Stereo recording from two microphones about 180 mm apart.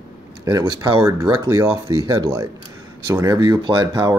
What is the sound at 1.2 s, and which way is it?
Speech, 15° right (ahead or behind).